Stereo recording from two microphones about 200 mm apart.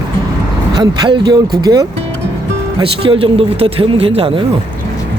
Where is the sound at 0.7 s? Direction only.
20° right (ahead or behind).